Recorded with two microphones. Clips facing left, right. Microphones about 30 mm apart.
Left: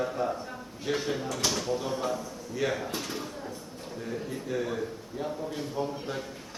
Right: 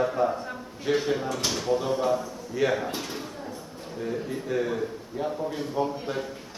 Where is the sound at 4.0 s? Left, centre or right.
Centre.